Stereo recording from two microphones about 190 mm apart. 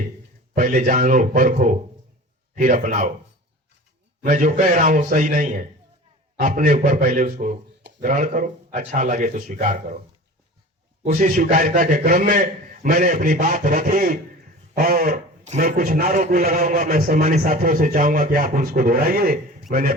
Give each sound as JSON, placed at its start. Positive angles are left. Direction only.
{"t": 0.5, "sound": "a man's voice", "side_deg": -45}
{"t": 4.3, "sound": "a man's voice", "side_deg": -45}
{"t": 11.0, "sound": "a man's voice", "side_deg": -40}